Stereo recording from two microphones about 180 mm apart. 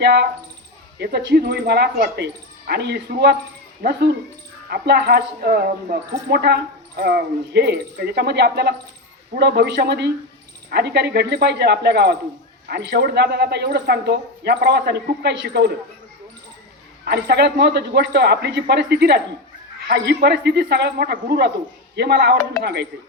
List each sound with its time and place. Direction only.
0.0 s speech: 65° right (ahead or behind)
4.7 s speech: 65° right (ahead or behind)
17.1 s speech: 65° right (ahead or behind)